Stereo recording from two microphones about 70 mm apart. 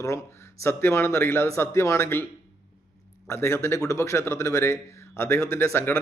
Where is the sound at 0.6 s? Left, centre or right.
Left.